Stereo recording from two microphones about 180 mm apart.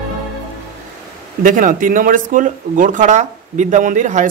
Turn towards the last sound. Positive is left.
turn(degrees=-45)  # may be behind; listen again after turning